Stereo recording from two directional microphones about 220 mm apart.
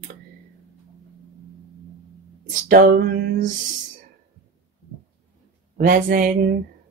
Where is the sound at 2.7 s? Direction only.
40° right (ahead or behind).